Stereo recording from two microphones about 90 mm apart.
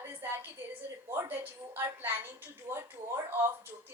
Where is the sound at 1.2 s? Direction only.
20° right (ahead or behind).